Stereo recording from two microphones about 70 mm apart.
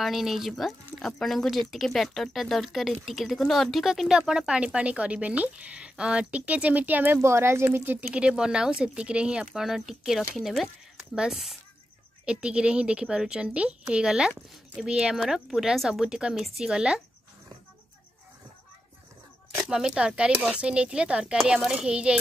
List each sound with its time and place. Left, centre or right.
0.0 s speech: centre; by 7.2 s right
7.2 s a woman's voice: right
8.2 s speech: centre
19.7 s speech: centre